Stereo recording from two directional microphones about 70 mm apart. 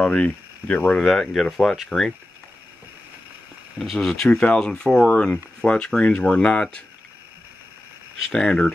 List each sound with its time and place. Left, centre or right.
0.0 s speech: centre
0.9 s speech: centre
3.8 s speech: centre
8.3 s speech: centre